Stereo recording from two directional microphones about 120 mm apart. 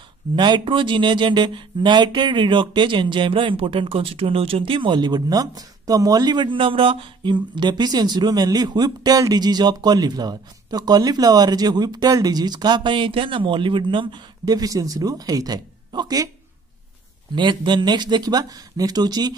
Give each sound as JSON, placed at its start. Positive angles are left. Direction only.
{"t": 0.4, "sound": "speech", "side_deg": -40}
{"t": 17.4, "sound": "speech", "side_deg": -40}